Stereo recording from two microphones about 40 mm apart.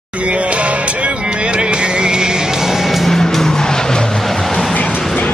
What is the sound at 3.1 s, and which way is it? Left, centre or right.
Vehicle, centre.